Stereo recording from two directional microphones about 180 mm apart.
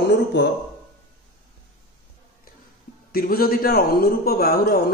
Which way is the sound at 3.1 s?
55° left (ahead or behind).